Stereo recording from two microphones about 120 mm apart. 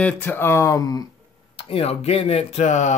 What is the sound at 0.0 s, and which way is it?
Speech, 15° left (ahead or behind).